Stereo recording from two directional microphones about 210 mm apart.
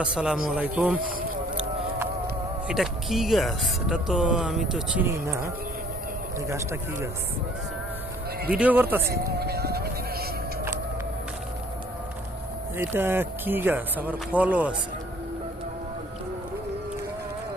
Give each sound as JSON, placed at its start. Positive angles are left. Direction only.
{"t": 0.0, "sound": "speech", "side_deg": -5}
{"t": 2.6, "sound": "speech", "side_deg": 0}
{"t": 6.5, "sound": "speech", "side_deg": -15}
{"t": 8.5, "sound": "speech", "side_deg": -10}
{"t": 9.4, "sound": "music", "side_deg": -50}
{"t": 12.7, "sound": "speech", "side_deg": -10}